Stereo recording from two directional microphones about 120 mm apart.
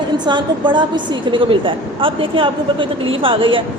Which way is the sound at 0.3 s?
40° right (ahead or behind).